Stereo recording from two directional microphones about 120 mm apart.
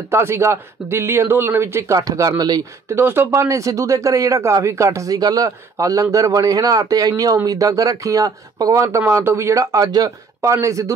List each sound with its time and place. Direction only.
0.1 s speech: 20° right (ahead or behind)
2.9 s speech: 20° right (ahead or behind)